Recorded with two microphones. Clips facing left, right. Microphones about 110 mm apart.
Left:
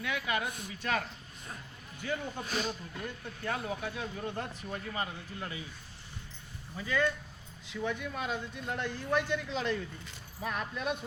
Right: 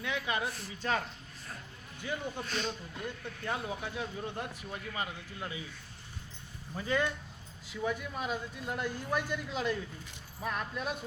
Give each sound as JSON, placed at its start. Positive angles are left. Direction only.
{"t": 0.0, "sound": "speech", "side_deg": -25}
{"t": 2.4, "sound": "speech", "side_deg": 5}
{"t": 3.4, "sound": "speech", "side_deg": -20}
{"t": 6.7, "sound": "speech", "side_deg": -35}
{"t": 7.7, "sound": "a man's voice", "side_deg": -5}